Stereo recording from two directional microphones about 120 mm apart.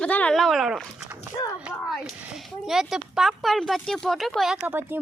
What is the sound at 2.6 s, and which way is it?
Speech, centre (ahead or behind).